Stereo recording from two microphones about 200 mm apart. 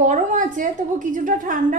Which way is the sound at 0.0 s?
40° right (ahead or behind).